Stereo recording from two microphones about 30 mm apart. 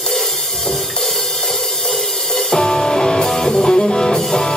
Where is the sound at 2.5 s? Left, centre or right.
Left.